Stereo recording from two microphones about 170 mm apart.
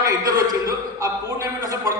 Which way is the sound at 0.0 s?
20° right (ahead or behind).